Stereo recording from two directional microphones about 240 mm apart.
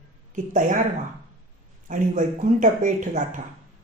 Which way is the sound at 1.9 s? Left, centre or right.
Right.